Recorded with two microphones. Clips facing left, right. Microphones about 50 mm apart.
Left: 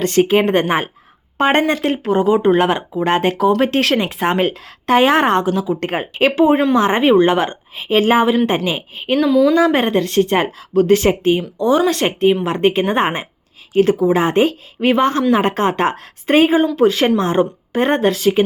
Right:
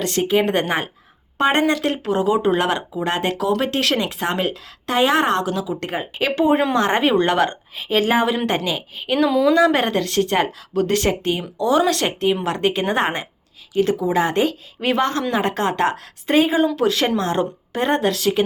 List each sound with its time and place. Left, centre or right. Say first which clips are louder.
0.0 s a woman's voice: left 5 dB; left
2.0 s a woman's voice: left 5 dB; centre; by 6.3 s left
6.3 s a woman's voice: left 3 dB; left
7.8 s a woman's voice: left 4 dB; left
9.1 s speech: left 3 dB; centre
9.6 s a woman's voice: left 2 dB; left
11.3 s speech: left 3 dB; centre
11.9 s a woman's voice: left 4 dB; left
12.3 s speech: left 4 dB; centre
13.0 s a woman's voice: left 3 dB; left
16.7 s a woman's voice: left 5 dB; centre
18.2 s a woman's voice: left 4 dB; centre